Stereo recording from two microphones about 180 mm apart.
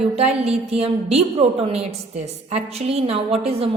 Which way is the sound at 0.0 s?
35° right (ahead or behind).